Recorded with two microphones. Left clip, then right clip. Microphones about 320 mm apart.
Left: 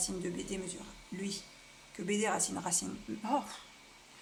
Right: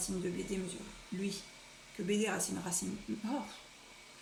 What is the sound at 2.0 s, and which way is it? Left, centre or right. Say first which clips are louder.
Speech: left 2 dB; centre.